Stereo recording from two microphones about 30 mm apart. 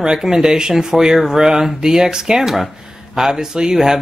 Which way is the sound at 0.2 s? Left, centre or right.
Right.